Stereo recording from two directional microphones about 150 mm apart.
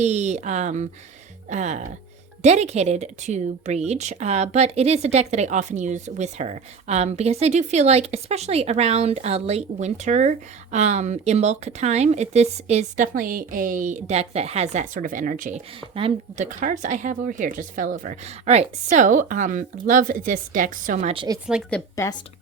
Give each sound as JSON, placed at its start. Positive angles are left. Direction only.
{"t": 0.0, "sound": "speech", "side_deg": -50}
{"t": 13.1, "sound": "speech", "side_deg": -65}
{"t": 15.8, "sound": "speech", "side_deg": -40}
{"t": 16.4, "sound": "speech", "side_deg": -60}
{"t": 21.3, "sound": "a woman's voice", "side_deg": -25}
{"t": 22.0, "sound": "a woman's voice", "side_deg": 20}